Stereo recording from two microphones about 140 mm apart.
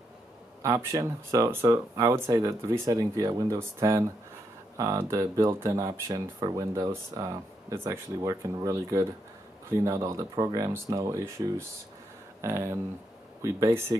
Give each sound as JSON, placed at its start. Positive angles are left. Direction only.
{"t": 0.6, "sound": "speech", "side_deg": -20}